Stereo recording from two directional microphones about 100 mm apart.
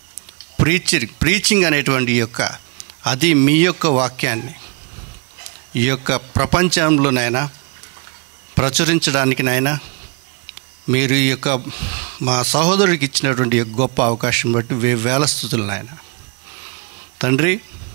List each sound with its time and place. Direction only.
0.6 s a man's voice: 20° right (ahead or behind)
8.5 s a man's voice: 20° right (ahead or behind)
16.5 s a sound: 20° right (ahead or behind)